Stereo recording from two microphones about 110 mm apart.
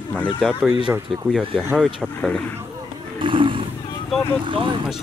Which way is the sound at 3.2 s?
50° right (ahead or behind).